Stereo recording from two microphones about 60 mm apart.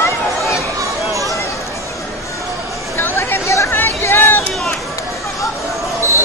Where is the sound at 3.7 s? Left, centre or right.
Left.